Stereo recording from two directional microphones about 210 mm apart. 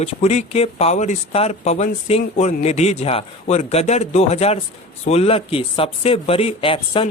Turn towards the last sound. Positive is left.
turn(degrees=25)  # may be behind; listen again after turning